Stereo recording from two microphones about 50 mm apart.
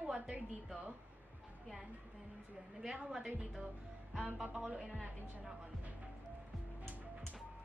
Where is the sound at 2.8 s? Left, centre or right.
Centre.